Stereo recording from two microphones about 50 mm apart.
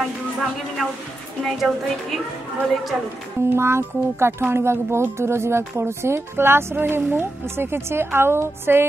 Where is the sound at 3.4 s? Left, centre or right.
Right.